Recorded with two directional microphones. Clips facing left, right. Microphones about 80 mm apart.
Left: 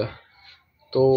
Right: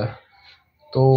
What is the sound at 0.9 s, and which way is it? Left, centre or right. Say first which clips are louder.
Speech: right 1 dB; centre.